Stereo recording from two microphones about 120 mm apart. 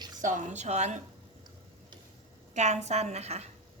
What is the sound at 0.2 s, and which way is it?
Speech, 90° right.